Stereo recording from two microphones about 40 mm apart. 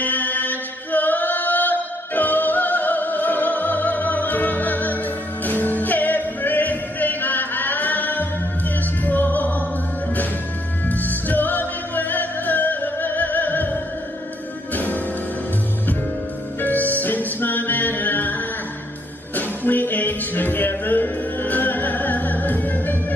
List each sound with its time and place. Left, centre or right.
0.0 s chant: left
5.4 s music: left
10.9 s music: left
16.6 s music: left
19.3 s music: left